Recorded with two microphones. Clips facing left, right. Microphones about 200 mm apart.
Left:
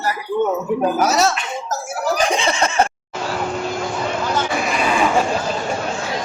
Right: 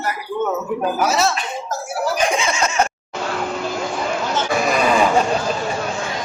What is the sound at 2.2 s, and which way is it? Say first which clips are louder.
Snicker: left 1 dB; 35° left (ahead or behind).